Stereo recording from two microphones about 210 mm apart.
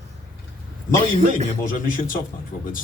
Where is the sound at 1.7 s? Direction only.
40° left (ahead or behind).